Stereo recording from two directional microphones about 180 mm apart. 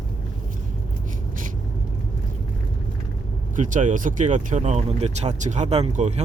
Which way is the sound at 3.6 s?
45° right (ahead or behind).